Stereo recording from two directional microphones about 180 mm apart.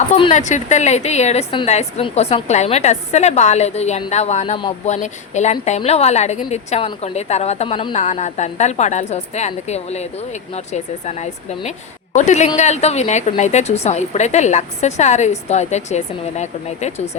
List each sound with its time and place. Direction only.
0.2 s a woman's voice: 40° left (ahead or behind)